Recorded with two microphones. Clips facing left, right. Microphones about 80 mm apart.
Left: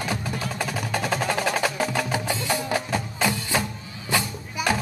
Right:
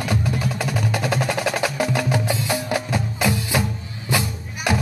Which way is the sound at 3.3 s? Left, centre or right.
Centre.